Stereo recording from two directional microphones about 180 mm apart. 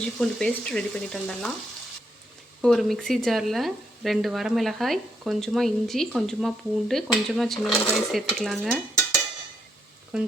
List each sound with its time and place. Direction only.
0.2 s speech: 5° left (ahead or behind)
2.6 s speech: centre (ahead or behind)